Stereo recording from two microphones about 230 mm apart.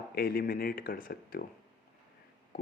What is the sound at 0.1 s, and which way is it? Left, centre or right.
Speech, left.